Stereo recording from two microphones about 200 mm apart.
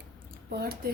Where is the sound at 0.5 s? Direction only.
50° right (ahead or behind).